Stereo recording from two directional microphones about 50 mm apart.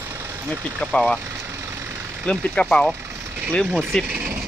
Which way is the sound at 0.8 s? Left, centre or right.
Centre.